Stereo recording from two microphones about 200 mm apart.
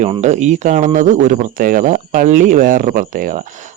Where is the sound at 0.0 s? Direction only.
35° right (ahead or behind).